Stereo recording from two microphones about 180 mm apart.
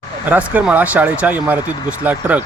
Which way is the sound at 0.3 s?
10° right (ahead or behind).